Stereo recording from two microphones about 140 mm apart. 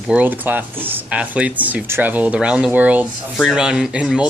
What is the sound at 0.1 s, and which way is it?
Speech, 10° right (ahead or behind).